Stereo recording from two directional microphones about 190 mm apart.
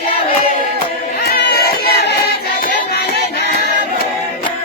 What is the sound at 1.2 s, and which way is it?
Music, 55° left (ahead or behind).